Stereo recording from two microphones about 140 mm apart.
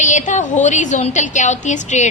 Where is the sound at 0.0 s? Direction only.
60° left (ahead or behind).